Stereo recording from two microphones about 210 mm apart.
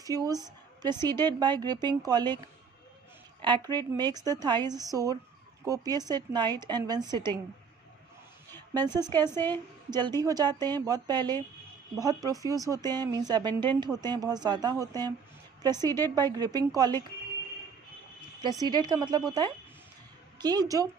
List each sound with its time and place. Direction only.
0.0 s a woman's voice: 15° right (ahead or behind)
3.4 s a woman's voice: 20° right (ahead or behind)
8.4 s a sound: 10° left (ahead or behind)
8.8 s a woman's voice: 20° right (ahead or behind)
9.3 s a woman's voice: 10° left (ahead or behind)
9.9 s a woman's voice: 20° right (ahead or behind)
18.6 s a woman's voice: 20° right (ahead or behind)